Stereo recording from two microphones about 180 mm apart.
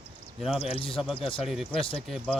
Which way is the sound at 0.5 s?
35° left (ahead or behind).